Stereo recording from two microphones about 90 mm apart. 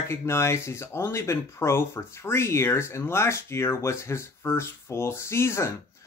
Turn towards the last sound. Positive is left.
turn(degrees=30)  # may be behind; listen again after turning